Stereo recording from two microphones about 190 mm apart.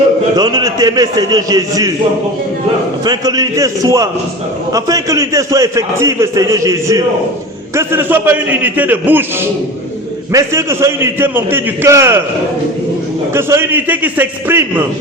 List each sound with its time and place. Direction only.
0.3 s a man's voice: 20° right (ahead or behind)
3.0 s a man's voice: 20° right (ahead or behind)
13.3 s a man's voice: 10° right (ahead or behind)